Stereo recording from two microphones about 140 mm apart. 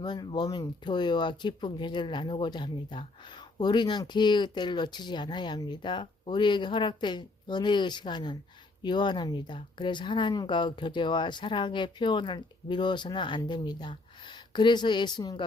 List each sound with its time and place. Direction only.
0.0 s speech: 30° left (ahead or behind)